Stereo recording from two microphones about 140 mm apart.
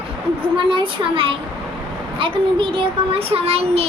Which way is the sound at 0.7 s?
40° right (ahead or behind).